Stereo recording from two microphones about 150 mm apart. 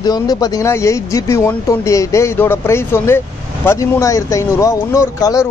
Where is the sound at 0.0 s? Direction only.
25° left (ahead or behind).